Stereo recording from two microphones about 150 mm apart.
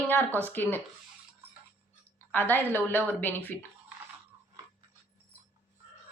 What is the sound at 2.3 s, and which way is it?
A woman's voice, 15° left (ahead or behind).